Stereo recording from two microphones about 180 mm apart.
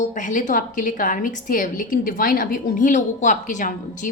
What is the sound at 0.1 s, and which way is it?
A woman's voice, 45° left (ahead or behind).